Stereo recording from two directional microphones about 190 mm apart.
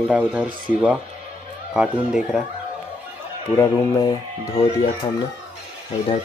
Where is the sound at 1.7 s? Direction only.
5° right (ahead or behind).